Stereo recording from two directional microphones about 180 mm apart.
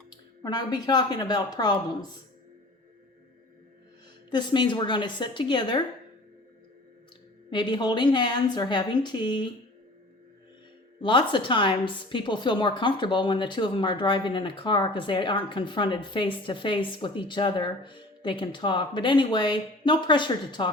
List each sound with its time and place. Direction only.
0.4 s a woman's voice: 25° left (ahead or behind)
4.3 s a woman's voice: 25° left (ahead or behind)
7.5 s a woman's voice: 25° left (ahead or behind)
11.0 s a woman's voice: 30° left (ahead or behind)